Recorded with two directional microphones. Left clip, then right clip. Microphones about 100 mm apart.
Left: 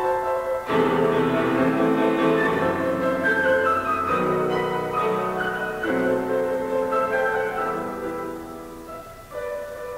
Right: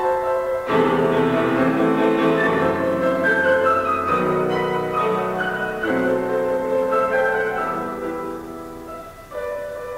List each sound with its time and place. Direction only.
0.0 s music: 35° left (ahead or behind)